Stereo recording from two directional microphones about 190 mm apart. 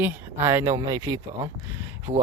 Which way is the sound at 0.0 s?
10° right (ahead or behind).